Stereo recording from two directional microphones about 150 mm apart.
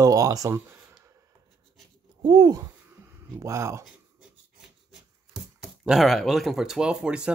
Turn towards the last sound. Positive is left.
turn(degrees=-5)  # may be behind; listen again after turning